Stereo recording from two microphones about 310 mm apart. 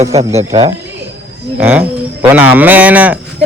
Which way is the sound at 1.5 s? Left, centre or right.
Centre.